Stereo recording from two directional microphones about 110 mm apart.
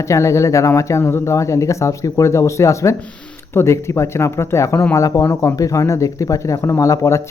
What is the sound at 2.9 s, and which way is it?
Speech, 10° left (ahead or behind).